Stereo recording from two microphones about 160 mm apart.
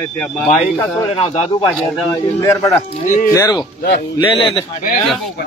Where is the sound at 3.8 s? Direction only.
75° left (ahead or behind).